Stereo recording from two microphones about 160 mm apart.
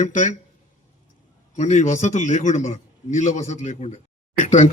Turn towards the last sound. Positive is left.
turn(degrees=45)  # may be behind; listen again after turning